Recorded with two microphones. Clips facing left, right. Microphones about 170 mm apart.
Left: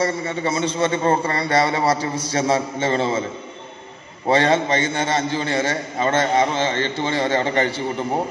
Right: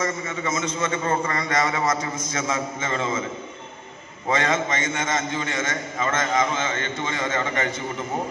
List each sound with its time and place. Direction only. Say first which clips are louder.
0.0 s a man's voice: left 5 dB; 35° left (ahead or behind)
4.3 s a man's voice: left 6 dB; 35° left (ahead or behind)